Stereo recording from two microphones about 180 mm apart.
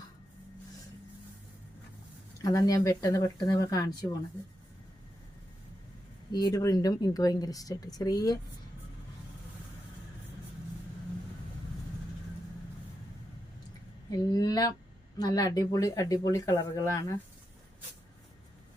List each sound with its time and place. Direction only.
2.4 s speech: 20° left (ahead or behind)
6.3 s speech: 20° left (ahead or behind)
14.1 s speech: 20° left (ahead or behind)